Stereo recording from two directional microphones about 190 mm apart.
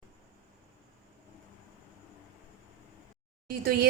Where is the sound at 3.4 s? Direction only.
50° right (ahead or behind).